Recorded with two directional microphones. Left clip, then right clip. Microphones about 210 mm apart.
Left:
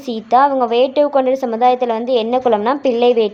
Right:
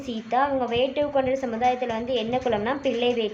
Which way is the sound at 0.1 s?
40° left (ahead or behind).